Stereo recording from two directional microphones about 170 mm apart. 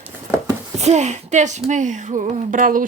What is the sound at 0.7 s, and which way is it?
Speech, 40° right (ahead or behind).